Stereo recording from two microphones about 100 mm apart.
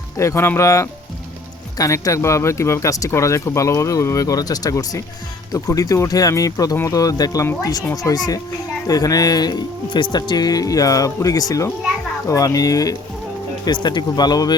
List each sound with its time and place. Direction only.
0.2 s speech: 25° left (ahead or behind)
13.7 s speech: 45° left (ahead or behind)